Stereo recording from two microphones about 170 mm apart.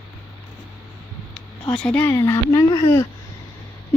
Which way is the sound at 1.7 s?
10° left (ahead or behind).